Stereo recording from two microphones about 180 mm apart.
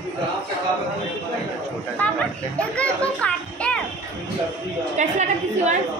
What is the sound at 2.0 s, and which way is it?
A child's voice, 10° left (ahead or behind).